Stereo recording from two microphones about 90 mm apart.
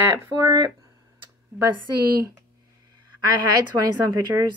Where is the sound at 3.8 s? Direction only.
45° right (ahead or behind).